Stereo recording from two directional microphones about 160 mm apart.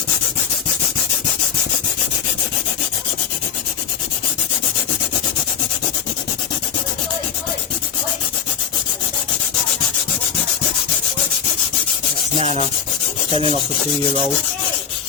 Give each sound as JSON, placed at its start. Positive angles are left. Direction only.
{"t": 12.4, "sound": "rub", "side_deg": -45}